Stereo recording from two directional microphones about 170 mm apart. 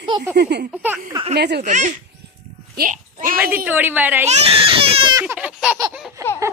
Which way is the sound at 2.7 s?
55° right (ahead or behind).